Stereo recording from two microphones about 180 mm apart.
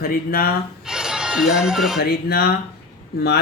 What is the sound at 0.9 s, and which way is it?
Speech, 5° right (ahead or behind).